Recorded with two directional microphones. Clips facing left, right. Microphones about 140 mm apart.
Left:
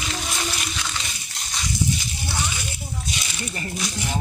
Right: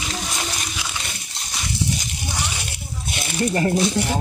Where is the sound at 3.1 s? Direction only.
60° right (ahead or behind).